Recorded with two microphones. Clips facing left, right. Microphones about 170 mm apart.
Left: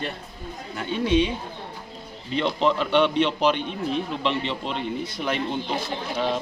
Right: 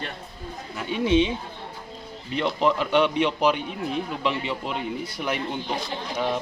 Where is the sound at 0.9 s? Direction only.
20° right (ahead or behind).